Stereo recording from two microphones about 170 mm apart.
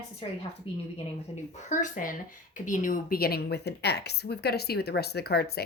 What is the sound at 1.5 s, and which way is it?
A woman's voice, 50° left (ahead or behind).